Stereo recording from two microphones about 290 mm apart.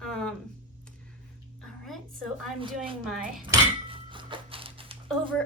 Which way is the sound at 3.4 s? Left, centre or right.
Centre.